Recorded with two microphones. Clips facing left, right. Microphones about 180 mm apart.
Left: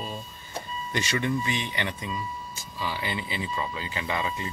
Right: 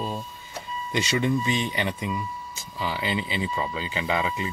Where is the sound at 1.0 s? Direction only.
20° right (ahead or behind).